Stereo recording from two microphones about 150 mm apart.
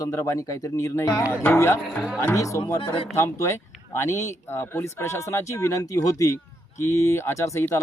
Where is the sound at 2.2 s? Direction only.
20° left (ahead or behind).